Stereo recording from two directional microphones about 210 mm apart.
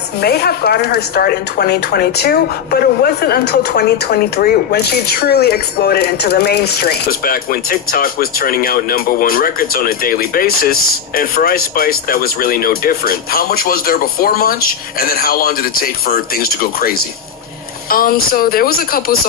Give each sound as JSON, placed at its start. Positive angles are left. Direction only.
{"t": 0.2, "sound": "speech", "side_deg": 50}